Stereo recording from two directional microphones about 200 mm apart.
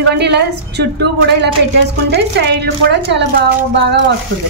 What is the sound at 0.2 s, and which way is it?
A woman's voice, 55° right (ahead or behind).